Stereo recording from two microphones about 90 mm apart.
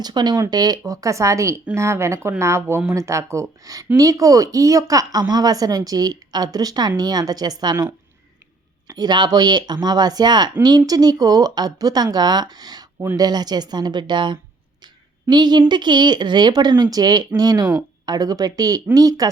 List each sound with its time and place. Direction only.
0.0 s speech: 50° right (ahead or behind)
8.9 s speech: 50° right (ahead or behind)